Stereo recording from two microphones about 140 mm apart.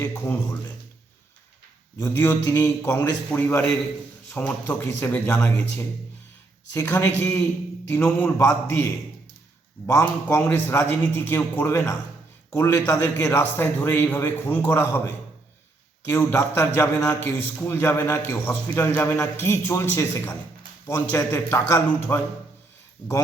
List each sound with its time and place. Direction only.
0.0 s a man's voice: 20° left (ahead or behind)
2.0 s a man's voice: 20° left (ahead or behind)
16.0 s a man's voice: 20° left (ahead or behind)